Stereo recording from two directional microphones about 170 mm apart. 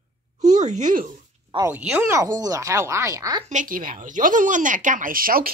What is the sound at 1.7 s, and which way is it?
Speech, 10° right (ahead or behind).